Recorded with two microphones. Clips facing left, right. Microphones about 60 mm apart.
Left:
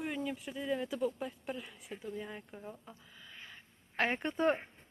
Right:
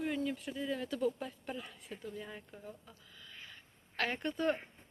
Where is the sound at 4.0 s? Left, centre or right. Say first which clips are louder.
Left 3 dB; left.